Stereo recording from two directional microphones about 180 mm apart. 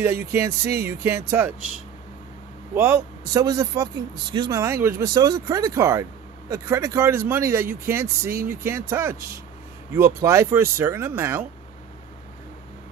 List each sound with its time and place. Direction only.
0.0 s speech: 15° right (ahead or behind)
2.7 s speech: 10° right (ahead or behind)